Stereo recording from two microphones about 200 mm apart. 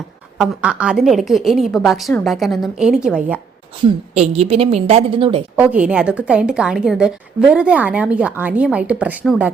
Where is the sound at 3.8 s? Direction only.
30° right (ahead or behind).